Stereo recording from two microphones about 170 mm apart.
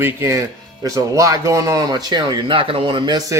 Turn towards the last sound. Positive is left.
turn(degrees=-25)  # may be behind; listen again after turning